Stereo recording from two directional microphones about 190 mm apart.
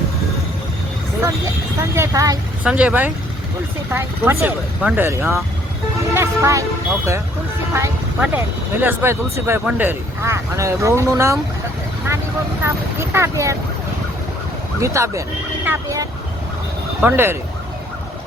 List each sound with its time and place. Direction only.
2.0 s speech: 15° right (ahead or behind)
2.6 s speech: 5° right (ahead or behind)
12.6 s speech: 15° right (ahead or behind)
14.8 s speech: 15° right (ahead or behind)